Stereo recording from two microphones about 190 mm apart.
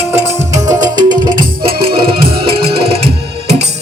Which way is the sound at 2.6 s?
30° right (ahead or behind).